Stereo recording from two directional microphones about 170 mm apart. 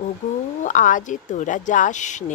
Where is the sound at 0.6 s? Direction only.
50° left (ahead or behind).